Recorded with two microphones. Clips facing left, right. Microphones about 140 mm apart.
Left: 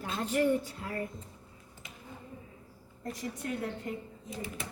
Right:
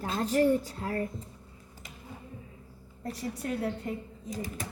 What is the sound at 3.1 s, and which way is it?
A child's voice, 35° right (ahead or behind).